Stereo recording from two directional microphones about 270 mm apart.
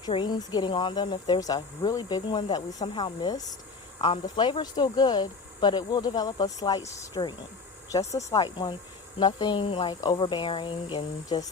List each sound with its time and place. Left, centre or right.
0.0 s speech: centre